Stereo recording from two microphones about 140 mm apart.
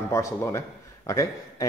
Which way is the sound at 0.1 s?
20° left (ahead or behind).